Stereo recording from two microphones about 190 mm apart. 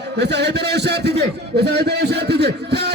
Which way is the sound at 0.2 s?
60° right (ahead or behind).